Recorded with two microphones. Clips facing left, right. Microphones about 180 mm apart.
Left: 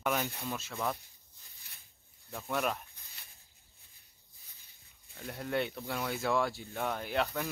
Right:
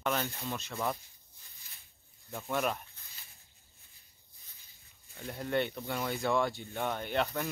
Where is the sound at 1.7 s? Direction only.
70° left (ahead or behind).